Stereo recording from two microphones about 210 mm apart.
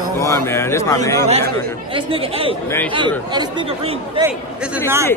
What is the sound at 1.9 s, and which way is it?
Speech, 25° right (ahead or behind).